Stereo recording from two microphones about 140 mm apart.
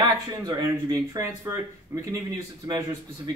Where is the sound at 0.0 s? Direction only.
30° right (ahead or behind).